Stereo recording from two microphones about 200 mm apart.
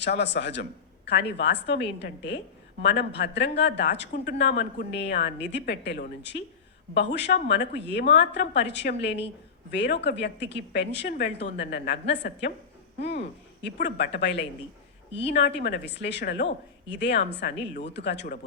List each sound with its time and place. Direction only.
0.0 s a man's voice: 60° left (ahead or behind)